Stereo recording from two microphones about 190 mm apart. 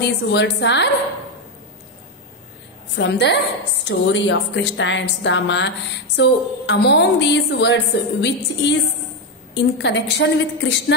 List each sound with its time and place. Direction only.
0.0 s a woman's voice: 65° left (ahead or behind)
3.0 s a woman's voice: 65° left (ahead or behind)